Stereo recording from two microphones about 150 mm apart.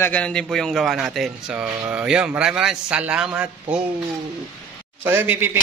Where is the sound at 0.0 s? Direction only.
10° left (ahead or behind); by 3.4 s 5° right (ahead or behind).